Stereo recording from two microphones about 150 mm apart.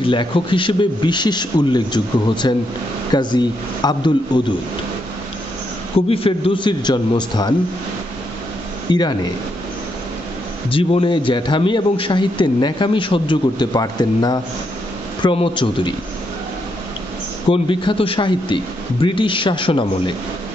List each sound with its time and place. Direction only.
0.0 s a man's voice: 35° left (ahead or behind)
5.9 s a man's voice: 40° left (ahead or behind)
8.9 s speech: 30° left (ahead or behind)
10.7 s a man's voice: 35° left (ahead or behind)
17.5 s a man's voice: 35° left (ahead or behind)